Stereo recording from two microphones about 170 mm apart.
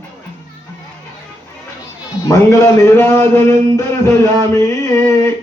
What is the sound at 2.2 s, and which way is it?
Speech, 15° left (ahead or behind).